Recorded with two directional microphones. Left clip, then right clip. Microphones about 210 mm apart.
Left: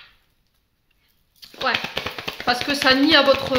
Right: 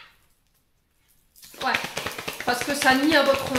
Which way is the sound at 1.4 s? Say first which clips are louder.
Left 3 dB; 35° left (ahead or behind).